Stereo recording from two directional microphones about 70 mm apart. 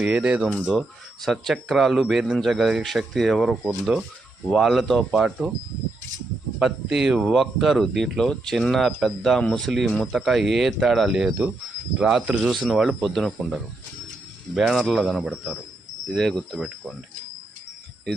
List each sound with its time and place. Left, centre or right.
0.0 s speech: centre
6.6 s speech: centre
11.3 s speech: centre
12.4 s speech: centre
14.6 s speech: centre